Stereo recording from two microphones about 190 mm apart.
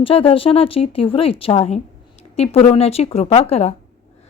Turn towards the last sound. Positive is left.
turn(degrees=35)  # may be behind; listen again after turning